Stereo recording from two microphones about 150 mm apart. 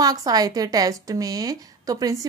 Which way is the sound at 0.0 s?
25° right (ahead or behind).